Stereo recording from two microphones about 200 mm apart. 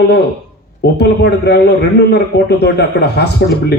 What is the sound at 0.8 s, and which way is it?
A man's voice, 55° left (ahead or behind).